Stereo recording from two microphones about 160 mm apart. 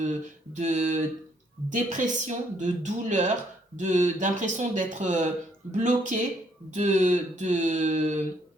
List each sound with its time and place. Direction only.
0.5 s speech: 50° right (ahead or behind)